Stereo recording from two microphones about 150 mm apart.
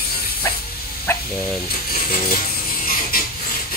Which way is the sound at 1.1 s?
15° left (ahead or behind).